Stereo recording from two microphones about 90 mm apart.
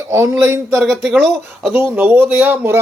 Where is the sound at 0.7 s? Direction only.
5° right (ahead or behind).